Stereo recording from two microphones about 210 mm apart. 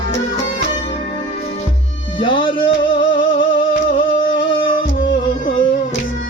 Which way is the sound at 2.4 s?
25° left (ahead or behind).